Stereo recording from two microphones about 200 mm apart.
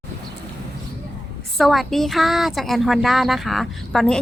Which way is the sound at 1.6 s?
Centre (ahead or behind).